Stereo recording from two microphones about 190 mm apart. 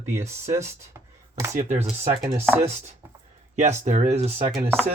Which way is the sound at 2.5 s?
Centre (ahead or behind).